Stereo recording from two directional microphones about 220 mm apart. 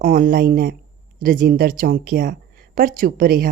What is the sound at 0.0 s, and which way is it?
Speech, 35° right (ahead or behind).